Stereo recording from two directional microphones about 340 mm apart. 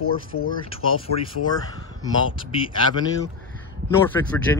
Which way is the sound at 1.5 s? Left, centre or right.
Centre.